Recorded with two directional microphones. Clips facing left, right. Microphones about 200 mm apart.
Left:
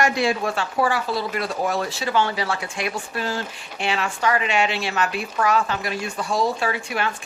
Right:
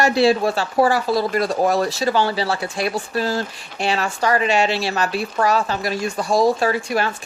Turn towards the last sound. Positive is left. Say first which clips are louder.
# right 5 dB
turn(degrees=-40)  # may be behind; listen again after turning